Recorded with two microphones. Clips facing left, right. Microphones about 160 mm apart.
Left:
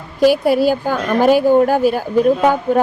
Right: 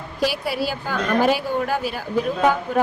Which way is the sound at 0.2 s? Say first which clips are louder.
Left 11 dB; 50° left (ahead or behind).